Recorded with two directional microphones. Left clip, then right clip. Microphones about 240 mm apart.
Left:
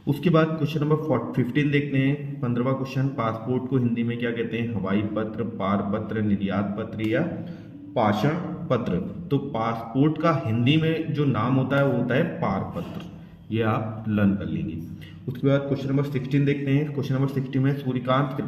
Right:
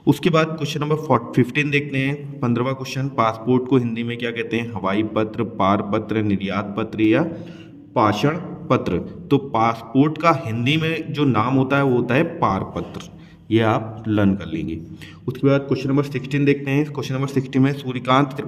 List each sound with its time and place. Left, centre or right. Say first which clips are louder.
0.0 s a man's voice: right 4 dB; right